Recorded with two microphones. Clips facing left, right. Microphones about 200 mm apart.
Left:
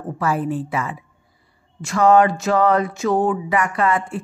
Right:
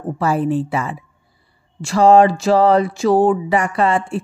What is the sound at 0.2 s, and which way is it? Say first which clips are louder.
Speech: right 4 dB; 30° right (ahead or behind).